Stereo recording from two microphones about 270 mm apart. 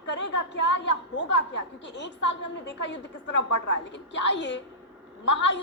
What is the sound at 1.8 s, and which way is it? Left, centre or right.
A woman's voice, left.